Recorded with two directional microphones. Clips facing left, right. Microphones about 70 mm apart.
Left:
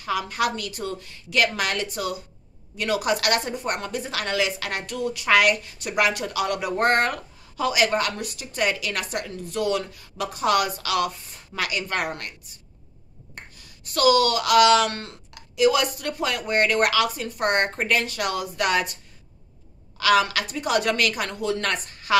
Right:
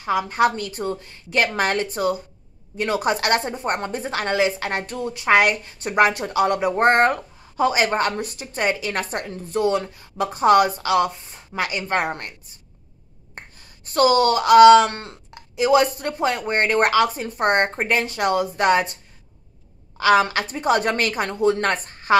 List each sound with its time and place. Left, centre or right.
0.0 s a woman's voice: right
20.0 s a woman's voice: right